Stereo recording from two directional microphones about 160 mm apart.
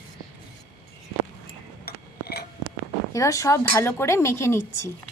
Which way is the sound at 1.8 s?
75° left (ahead or behind).